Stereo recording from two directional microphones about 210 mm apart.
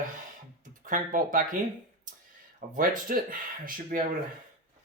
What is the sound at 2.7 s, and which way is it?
Speech, 40° right (ahead or behind).